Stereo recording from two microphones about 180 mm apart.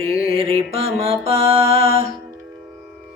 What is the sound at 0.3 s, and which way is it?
Mantra, 30° right (ahead or behind).